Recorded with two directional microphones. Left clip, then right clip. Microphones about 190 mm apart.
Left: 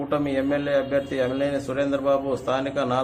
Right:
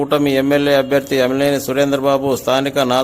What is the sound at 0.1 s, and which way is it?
A man's voice, 50° right (ahead or behind).